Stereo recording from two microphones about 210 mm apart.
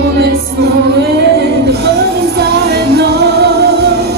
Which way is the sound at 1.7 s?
50° right (ahead or behind).